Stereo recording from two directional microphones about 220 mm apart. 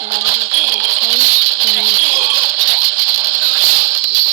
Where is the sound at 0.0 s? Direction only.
30° right (ahead or behind).